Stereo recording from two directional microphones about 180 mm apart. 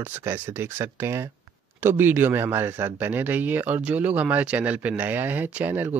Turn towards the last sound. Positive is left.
turn(degrees=-10)  # may be behind; listen again after turning